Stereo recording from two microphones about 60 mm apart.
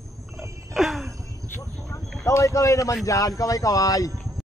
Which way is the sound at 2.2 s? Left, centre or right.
Left.